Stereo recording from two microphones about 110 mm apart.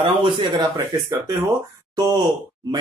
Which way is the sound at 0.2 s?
45° right (ahead or behind).